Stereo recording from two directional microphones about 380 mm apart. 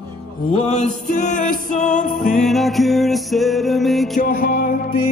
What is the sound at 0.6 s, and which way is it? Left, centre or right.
Music, centre.